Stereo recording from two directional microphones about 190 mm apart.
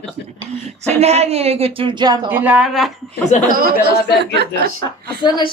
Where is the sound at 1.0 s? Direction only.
35° right (ahead or behind).